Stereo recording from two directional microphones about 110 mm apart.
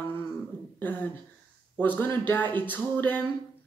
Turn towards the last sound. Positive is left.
turn(degrees=15)  # may be behind; listen again after turning